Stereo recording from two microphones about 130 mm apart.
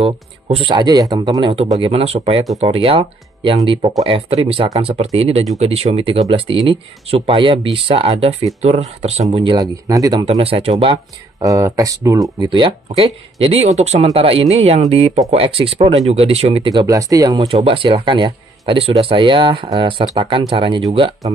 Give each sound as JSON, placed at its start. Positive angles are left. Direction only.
{"t": 0.0, "sound": "speech", "side_deg": -45}
{"t": 9.3, "sound": "speech", "side_deg": -40}
{"t": 9.6, "sound": "speech", "side_deg": -30}
{"t": 10.2, "sound": "speech", "side_deg": -45}
{"t": 11.4, "sound": "speech", "side_deg": -25}
{"t": 12.4, "sound": "speech", "side_deg": -40}
{"t": 16.7, "sound": "speech", "side_deg": -25}
{"t": 17.4, "sound": "speech", "side_deg": -45}